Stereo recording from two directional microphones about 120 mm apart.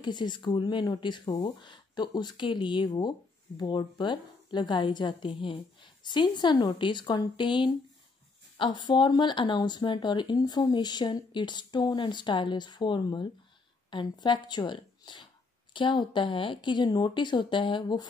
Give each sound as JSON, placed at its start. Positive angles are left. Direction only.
{"t": 0.0, "sound": "speech", "side_deg": 35}